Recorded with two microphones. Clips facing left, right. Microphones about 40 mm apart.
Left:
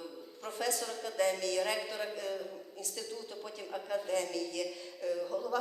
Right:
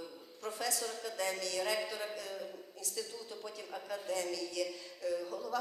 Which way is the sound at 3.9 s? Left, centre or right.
Left.